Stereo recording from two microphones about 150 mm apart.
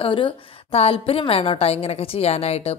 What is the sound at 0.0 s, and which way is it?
A woman's voice, 35° left (ahead or behind).